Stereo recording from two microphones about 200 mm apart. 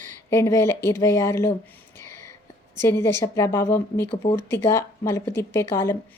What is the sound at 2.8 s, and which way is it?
A woman's voice, 10° left (ahead or behind).